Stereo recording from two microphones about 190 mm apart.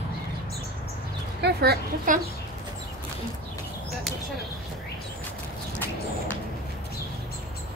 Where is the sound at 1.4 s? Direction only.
60° right (ahead or behind).